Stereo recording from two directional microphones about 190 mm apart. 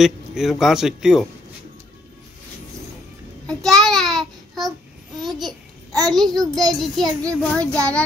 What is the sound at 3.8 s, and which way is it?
Babbling, centre (ahead or behind).